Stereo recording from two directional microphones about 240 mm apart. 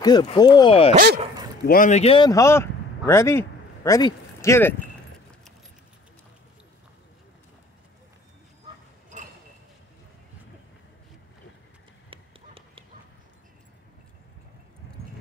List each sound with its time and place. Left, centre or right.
0.0 s speech: centre
0.9 s speech: right
1.7 s speech: left; by 4.7 s centre
12.1 s horse: right